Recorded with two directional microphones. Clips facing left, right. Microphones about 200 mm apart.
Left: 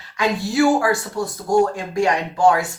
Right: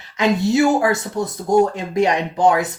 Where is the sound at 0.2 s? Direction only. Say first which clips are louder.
Right 2 dB; 20° right (ahead or behind).